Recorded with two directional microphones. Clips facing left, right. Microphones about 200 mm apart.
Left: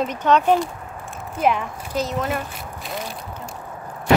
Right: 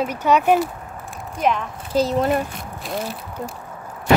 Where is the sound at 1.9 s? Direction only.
30° right (ahead or behind).